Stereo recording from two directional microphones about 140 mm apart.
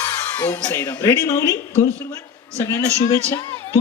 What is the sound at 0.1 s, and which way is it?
Speech, 15° left (ahead or behind).